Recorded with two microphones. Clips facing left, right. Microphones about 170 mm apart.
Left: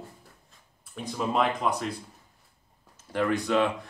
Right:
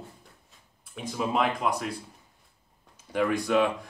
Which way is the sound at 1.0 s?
Centre (ahead or behind).